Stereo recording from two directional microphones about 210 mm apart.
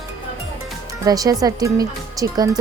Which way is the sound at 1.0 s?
15° right (ahead or behind).